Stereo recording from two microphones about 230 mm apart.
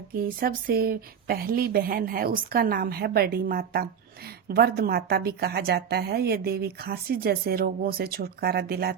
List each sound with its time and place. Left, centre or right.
0.1 s a woman's voice: right